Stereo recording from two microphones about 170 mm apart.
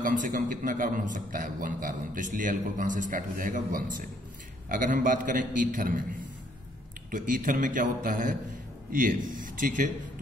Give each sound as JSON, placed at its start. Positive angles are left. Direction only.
{"t": 0.0, "sound": "a man's voice", "side_deg": -50}
{"t": 7.1, "sound": "a man's voice", "side_deg": -55}